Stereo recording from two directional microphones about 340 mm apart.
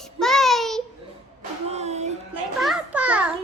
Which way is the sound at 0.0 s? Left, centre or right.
Centre.